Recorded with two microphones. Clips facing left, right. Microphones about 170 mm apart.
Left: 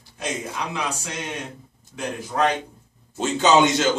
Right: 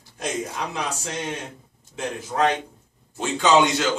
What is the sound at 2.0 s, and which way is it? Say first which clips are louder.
Speech: even; 25° right (ahead or behind).